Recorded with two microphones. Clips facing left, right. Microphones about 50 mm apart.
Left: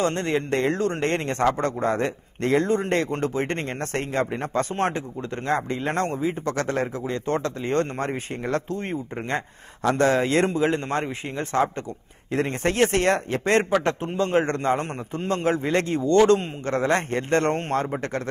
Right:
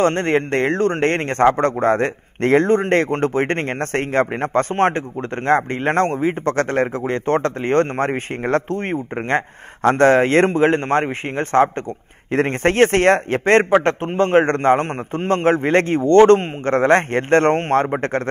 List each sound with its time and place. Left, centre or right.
0.0 s speech: right